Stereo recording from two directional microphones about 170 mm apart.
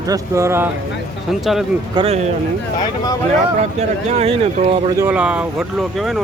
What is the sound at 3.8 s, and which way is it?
Speech, 40° right (ahead or behind).